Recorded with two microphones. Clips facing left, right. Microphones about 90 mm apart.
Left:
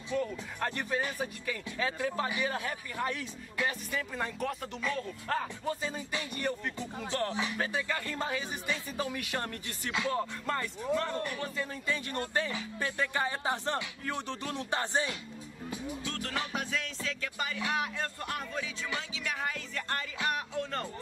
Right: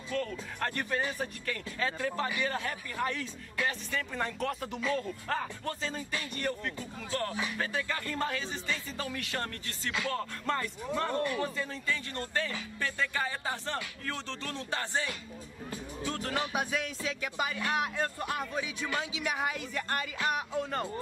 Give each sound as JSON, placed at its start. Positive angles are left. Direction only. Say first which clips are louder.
{"t": 0.1, "sound": "speech", "louder": "left 1 dB", "side_deg": 10}
{"t": 4.1, "sound": "speech", "louder": "right 3 dB", "side_deg": 5}
{"t": 10.4, "sound": "speech", "louder": "right 1 dB", "side_deg": 0}
{"t": 11.9, "sound": "speech", "louder": "left 2 dB", "side_deg": 20}
{"t": 16.1, "sound": "speech", "louder": "right 5 dB", "side_deg": -5}